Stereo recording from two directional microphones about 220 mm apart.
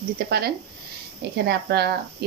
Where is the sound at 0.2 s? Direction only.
45° right (ahead or behind).